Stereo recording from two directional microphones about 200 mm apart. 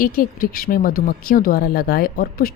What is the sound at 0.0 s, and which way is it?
Speech, 45° left (ahead or behind).